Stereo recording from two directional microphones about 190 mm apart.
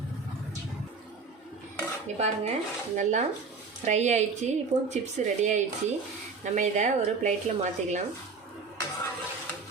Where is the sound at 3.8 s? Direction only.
35° right (ahead or behind).